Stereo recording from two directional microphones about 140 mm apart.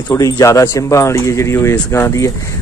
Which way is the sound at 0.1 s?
20° left (ahead or behind).